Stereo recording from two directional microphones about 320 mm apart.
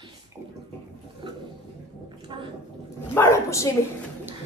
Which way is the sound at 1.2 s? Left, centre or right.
Centre.